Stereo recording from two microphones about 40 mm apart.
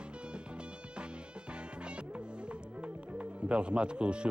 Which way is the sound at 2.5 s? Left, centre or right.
Right.